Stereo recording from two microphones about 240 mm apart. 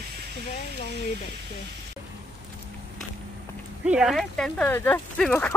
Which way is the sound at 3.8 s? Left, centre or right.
Centre.